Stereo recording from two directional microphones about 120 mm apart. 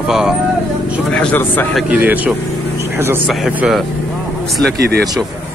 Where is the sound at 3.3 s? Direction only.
Centre (ahead or behind).